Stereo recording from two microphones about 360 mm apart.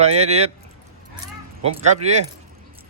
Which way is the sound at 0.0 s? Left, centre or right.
Centre.